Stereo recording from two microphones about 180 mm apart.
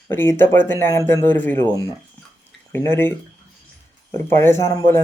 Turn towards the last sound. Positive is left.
turn(degrees=15)  # may be behind; listen again after turning